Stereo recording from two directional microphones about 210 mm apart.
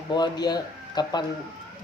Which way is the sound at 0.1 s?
20° left (ahead or behind).